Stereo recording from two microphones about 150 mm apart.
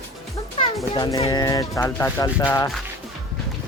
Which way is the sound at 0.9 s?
30° left (ahead or behind).